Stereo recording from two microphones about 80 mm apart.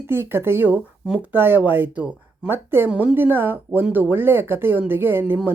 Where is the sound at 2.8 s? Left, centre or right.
Centre.